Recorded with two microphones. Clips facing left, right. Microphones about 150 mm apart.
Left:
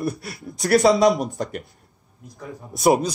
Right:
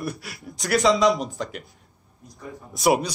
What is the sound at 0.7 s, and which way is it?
Speech, 50° left (ahead or behind).